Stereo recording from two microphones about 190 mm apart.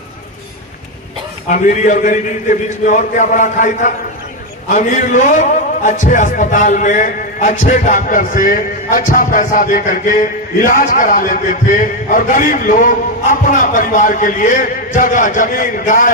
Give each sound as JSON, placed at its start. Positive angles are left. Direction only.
{"t": 1.5, "sound": "a man's voice", "side_deg": 45}